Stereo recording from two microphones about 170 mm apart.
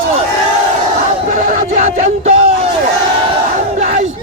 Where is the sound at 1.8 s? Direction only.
40° right (ahead or behind).